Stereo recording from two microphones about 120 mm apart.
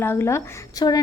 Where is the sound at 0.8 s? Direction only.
35° left (ahead or behind).